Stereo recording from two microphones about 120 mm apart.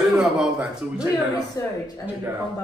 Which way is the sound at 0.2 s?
5° right (ahead or behind).